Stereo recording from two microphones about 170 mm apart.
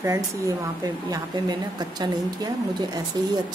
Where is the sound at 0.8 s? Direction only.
20° right (ahead or behind).